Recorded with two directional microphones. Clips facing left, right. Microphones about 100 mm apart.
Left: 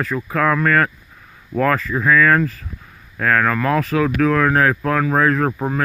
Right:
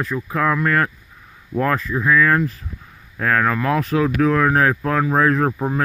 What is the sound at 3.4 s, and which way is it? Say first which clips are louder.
Speech: left 1 dB; 20° right (ahead or behind).